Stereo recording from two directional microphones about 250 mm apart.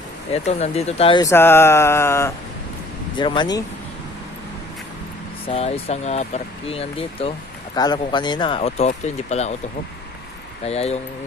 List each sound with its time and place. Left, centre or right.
0.3 s speech: left
5.5 s speech: left
10.6 s speech: left